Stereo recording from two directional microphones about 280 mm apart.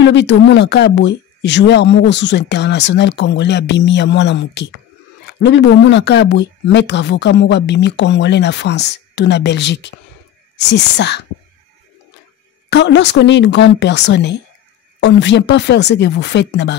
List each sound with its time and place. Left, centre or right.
0.0 s a woman's voice: left
12.6 s a woman's voice: left